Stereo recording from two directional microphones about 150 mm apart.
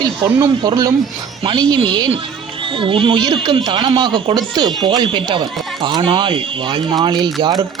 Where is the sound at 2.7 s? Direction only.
35° right (ahead or behind).